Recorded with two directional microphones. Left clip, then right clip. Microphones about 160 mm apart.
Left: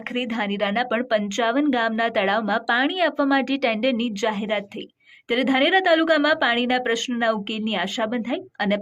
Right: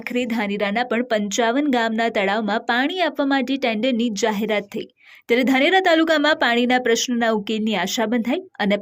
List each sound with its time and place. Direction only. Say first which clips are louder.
0.1 s a woman's voice: right 3 dB; 30° right (ahead or behind)